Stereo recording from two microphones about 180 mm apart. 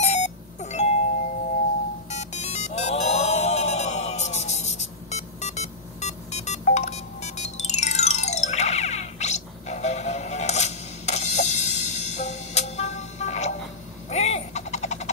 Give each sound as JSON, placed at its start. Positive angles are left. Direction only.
{"t": 0.0, "sound": "doorbell", "side_deg": 40}
{"t": 2.0, "sound": "music", "side_deg": 40}
{"t": 14.0, "sound": "a sound", "side_deg": 40}